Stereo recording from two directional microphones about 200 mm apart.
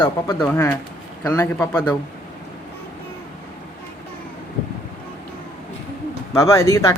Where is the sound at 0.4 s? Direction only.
10° left (ahead or behind).